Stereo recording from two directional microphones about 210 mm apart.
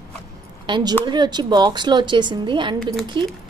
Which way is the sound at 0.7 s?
20° right (ahead or behind).